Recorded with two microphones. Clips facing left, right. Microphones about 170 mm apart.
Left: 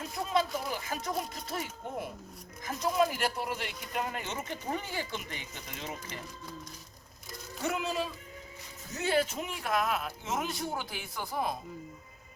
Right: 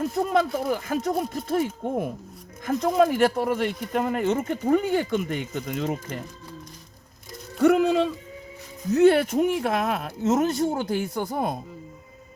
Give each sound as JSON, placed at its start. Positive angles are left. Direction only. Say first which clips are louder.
{"t": 0.0, "sound": "speech", "louder": "right 8 dB", "side_deg": -55}
{"t": 7.6, "sound": "speech", "louder": "right 14 dB", "side_deg": -65}